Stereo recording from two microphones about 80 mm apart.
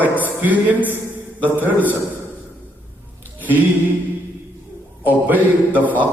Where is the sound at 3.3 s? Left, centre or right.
Right.